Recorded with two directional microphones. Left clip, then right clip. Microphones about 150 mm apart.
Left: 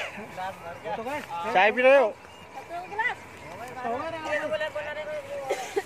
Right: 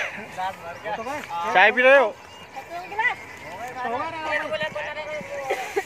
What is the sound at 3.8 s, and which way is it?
Speech, 75° left (ahead or behind).